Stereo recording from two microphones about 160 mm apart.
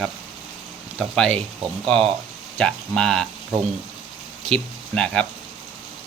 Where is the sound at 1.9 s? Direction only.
35° right (ahead or behind).